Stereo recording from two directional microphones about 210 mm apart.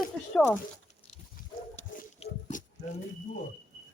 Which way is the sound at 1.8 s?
30° left (ahead or behind).